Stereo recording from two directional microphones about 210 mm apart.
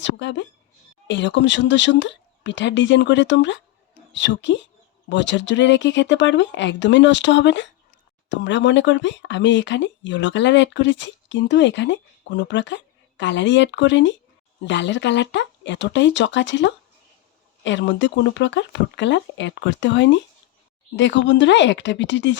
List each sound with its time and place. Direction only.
0.0 s speech: 55° left (ahead or behind)